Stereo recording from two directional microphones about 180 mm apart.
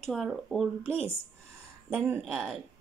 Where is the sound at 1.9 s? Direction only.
5° right (ahead or behind).